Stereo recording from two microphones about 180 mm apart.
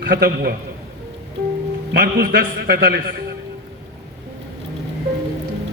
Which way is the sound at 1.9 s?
55° right (ahead or behind).